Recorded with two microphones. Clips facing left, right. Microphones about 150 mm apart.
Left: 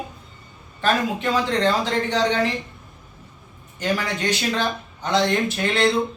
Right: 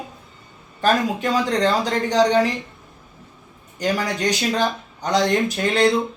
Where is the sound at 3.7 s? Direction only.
40° right (ahead or behind).